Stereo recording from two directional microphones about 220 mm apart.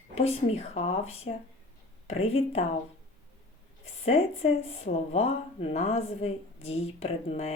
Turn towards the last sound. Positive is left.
turn(degrees=30)  # may be behind; listen again after turning